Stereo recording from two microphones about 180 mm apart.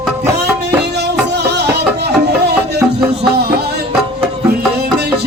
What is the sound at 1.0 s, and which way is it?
Music, 65° right (ahead or behind).